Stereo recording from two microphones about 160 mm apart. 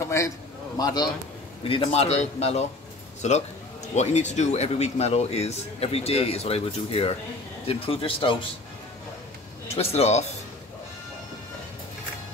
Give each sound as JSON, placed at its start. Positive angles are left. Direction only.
{"t": 0.0, "sound": "a sound", "side_deg": 20}
{"t": 0.7, "sound": "a man's voice", "side_deg": 25}
{"t": 1.6, "sound": "a man's voice", "side_deg": 35}
{"t": 9.8, "sound": "speech", "side_deg": 40}